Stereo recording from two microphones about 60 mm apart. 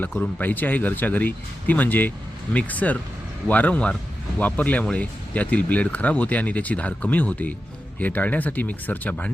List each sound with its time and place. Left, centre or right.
0.2 s speech: left